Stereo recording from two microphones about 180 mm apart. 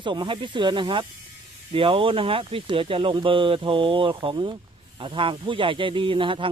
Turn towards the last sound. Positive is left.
turn(degrees=-30)  # may be behind; listen again after turning